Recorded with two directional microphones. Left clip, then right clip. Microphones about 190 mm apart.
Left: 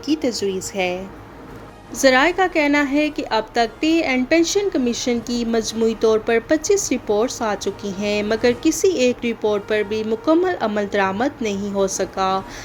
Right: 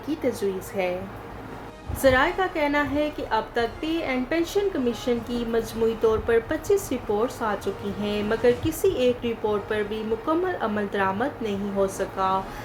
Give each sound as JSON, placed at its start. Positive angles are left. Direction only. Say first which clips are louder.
{"t": 2.0, "sound": "speech", "louder": "left 5 dB", "side_deg": 45}